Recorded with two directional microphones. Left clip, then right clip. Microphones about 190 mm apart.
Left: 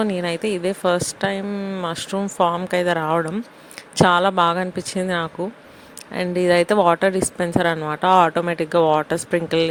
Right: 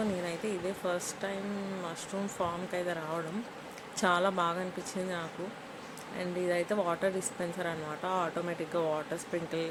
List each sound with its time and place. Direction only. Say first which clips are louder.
0.3 s a woman's voice: left 13 dB; 55° left (ahead or behind)